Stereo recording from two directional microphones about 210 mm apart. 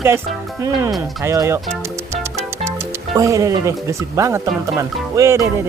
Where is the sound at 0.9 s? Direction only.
Centre (ahead or behind).